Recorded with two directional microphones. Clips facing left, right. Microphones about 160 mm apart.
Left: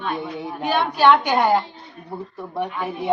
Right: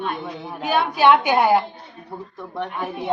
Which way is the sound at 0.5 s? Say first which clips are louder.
Even; 5° right (ahead or behind).